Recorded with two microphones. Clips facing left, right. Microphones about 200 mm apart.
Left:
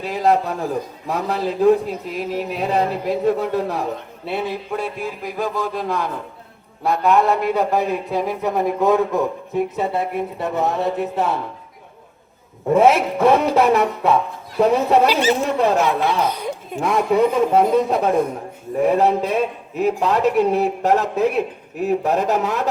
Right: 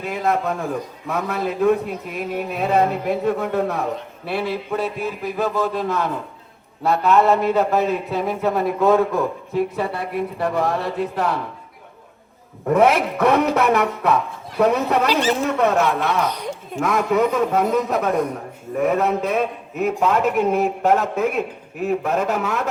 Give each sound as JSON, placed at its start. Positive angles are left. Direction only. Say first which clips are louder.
{"t": 0.0, "sound": "a man's voice", "louder": "left 3 dB", "side_deg": 35}
{"t": 4.3, "sound": "a man's voice", "louder": "right 1 dB", "side_deg": 20}
{"t": 12.7, "sound": "speech", "louder": "left 2 dB", "side_deg": 25}
{"t": 15.1, "sound": "speech", "louder": "left 1 dB", "side_deg": 5}
{"t": 15.5, "sound": "a man's voice", "louder": "left 1 dB", "side_deg": 30}